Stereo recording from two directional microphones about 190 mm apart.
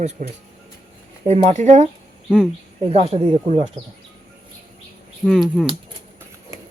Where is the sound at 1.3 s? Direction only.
35° right (ahead or behind).